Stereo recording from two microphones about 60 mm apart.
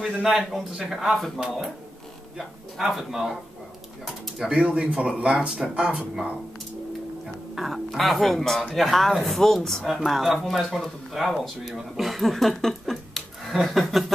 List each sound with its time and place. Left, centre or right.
0.0 s speech: centre
7.5 s speech: centre